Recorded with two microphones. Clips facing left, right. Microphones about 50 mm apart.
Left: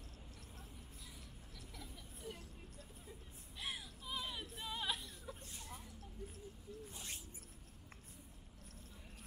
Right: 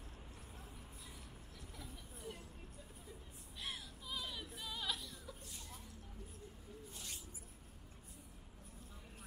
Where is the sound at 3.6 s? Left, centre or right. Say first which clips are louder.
Left 1 dB; centre.